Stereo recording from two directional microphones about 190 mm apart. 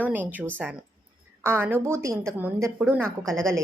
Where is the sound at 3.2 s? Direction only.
Centre (ahead or behind).